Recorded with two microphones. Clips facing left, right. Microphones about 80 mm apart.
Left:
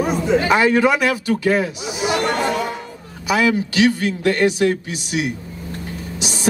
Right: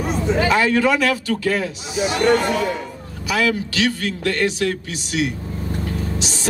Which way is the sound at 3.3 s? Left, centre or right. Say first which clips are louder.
Left 3 dB; left.